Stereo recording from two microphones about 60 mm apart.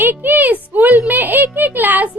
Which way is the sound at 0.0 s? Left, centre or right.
Right.